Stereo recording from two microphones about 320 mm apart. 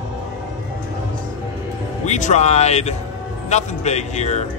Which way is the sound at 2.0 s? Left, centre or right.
Left.